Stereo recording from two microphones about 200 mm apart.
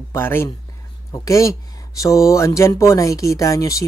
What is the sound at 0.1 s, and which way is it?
Speech, 10° left (ahead or behind).